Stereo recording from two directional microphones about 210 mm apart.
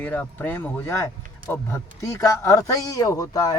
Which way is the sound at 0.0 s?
5° left (ahead or behind).